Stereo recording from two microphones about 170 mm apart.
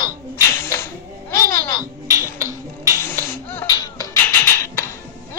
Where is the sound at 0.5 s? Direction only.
15° left (ahead or behind).